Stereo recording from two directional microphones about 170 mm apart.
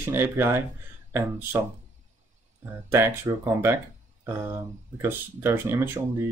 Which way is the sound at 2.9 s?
15° right (ahead or behind).